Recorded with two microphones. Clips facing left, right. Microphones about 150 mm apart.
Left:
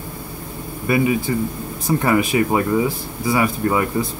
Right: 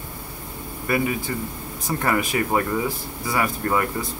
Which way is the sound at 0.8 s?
15° left (ahead or behind).